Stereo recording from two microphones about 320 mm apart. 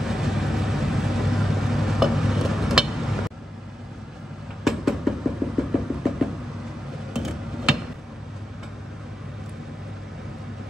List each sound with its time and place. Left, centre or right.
0.0 s vehicle: centre
4.6 s a sound: centre
7.2 s tick-tock: centre